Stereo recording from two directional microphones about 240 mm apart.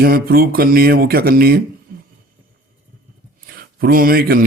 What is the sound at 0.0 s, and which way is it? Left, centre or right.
Speech, right.